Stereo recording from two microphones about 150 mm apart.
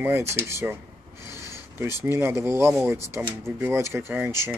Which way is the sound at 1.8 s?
15° right (ahead or behind).